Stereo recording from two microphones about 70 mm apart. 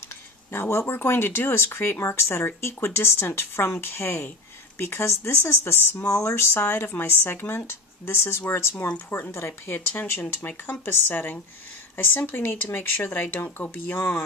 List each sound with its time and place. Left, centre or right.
0.5 s speech: left